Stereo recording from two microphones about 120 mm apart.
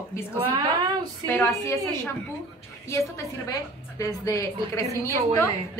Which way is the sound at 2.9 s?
25° left (ahead or behind).